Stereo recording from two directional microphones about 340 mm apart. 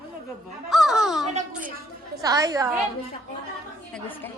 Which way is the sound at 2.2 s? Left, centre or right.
Centre.